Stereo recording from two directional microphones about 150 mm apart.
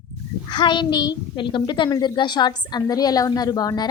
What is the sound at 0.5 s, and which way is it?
A woman's voice, 30° left (ahead or behind).